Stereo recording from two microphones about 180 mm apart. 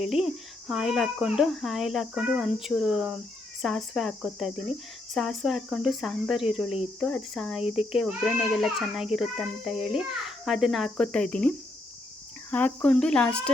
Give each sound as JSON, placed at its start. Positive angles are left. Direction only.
{"t": 0.0, "sound": "speech", "side_deg": 0}